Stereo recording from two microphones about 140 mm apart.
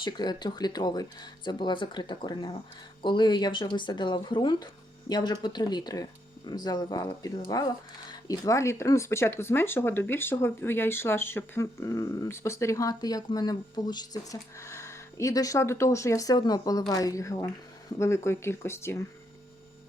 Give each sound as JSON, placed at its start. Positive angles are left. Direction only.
{"t": 0.0, "sound": "speech", "side_deg": 30}